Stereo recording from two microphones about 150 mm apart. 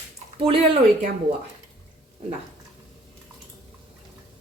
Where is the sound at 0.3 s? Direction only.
40° right (ahead or behind).